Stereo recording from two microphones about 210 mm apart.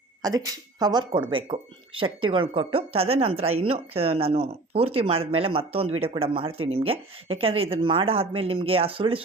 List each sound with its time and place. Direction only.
0.2 s speech: 20° right (ahead or behind)